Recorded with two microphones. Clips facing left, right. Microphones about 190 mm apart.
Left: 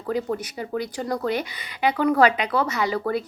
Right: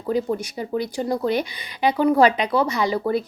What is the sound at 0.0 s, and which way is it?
Speech, 25° right (ahead or behind).